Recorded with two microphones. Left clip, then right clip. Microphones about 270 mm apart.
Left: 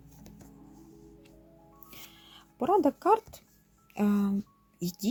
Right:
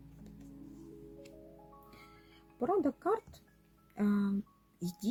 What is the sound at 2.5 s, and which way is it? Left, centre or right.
Speech, left.